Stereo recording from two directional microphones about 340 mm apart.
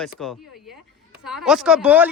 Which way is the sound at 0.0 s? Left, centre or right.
Centre.